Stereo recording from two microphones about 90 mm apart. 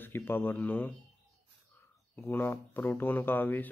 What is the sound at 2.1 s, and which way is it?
Speech, 30° left (ahead or behind).